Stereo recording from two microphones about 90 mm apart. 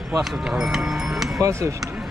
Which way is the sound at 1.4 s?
40° right (ahead or behind).